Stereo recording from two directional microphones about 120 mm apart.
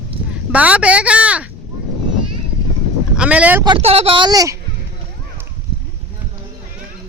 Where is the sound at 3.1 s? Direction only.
10° right (ahead or behind).